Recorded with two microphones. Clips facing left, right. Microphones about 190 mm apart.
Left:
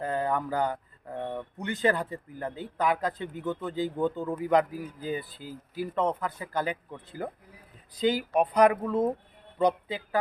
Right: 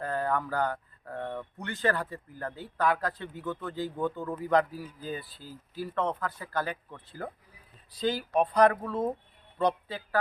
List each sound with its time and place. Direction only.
0.0 s speech: 15° left (ahead or behind)